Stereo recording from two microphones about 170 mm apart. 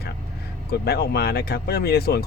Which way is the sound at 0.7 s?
70° left (ahead or behind).